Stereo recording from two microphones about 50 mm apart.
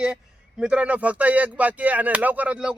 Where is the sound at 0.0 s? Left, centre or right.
Centre.